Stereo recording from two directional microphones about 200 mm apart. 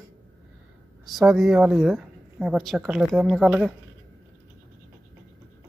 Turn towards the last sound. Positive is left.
turn(degrees=-5)  # may be behind; listen again after turning